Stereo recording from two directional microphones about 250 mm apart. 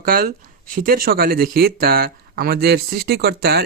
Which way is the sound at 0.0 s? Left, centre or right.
Right.